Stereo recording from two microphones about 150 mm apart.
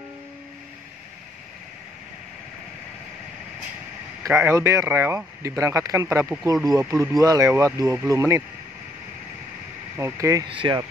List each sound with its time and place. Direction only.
4.2 s speech: 15° right (ahead or behind)
9.9 s speech: 20° right (ahead or behind)
10.5 s speech: 35° right (ahead or behind)